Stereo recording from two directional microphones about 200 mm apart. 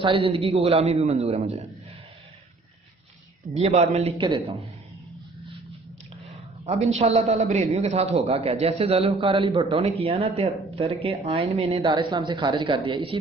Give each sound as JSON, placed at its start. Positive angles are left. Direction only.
{"t": 0.0, "sound": "a man's voice", "side_deg": -25}
{"t": 3.5, "sound": "a man's voice", "side_deg": -30}
{"t": 6.7, "sound": "a man's voice", "side_deg": -35}